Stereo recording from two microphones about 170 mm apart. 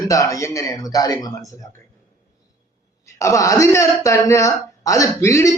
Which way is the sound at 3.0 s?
15° left (ahead or behind).